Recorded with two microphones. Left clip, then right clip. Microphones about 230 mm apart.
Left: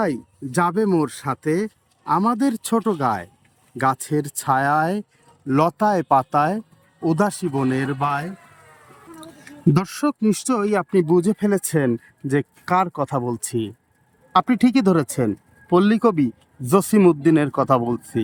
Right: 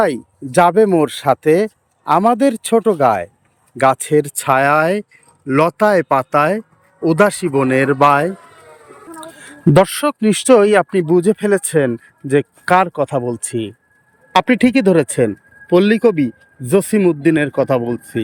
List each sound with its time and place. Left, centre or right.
0.0 s speech: centre
7.9 s speech: centre
9.5 s speech: centre